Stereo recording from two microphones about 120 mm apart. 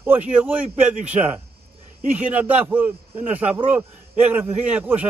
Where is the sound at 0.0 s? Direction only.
15° right (ahead or behind).